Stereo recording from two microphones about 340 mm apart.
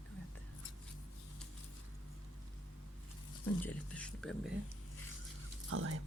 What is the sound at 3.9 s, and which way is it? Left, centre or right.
Speech, centre.